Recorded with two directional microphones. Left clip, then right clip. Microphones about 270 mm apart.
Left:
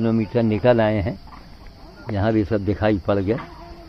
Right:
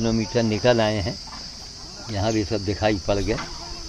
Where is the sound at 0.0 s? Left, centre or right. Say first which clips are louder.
Left 2 dB; centre.